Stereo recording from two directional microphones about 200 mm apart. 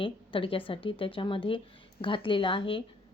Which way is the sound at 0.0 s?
25° left (ahead or behind).